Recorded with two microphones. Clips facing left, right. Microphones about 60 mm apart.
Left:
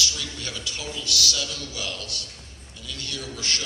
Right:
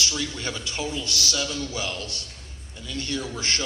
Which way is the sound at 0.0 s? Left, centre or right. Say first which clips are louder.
Right 2 dB; right.